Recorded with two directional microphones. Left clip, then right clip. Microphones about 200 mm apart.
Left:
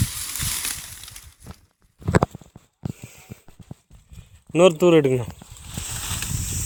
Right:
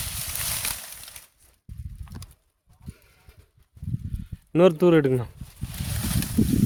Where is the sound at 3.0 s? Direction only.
5° right (ahead or behind).